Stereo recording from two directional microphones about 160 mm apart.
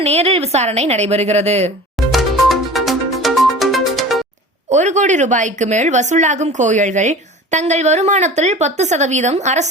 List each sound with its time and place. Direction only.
0.0 s a woman's voice: 40° right (ahead or behind)
2.1 s music: centre (ahead or behind)
4.7 s speech: 50° right (ahead or behind)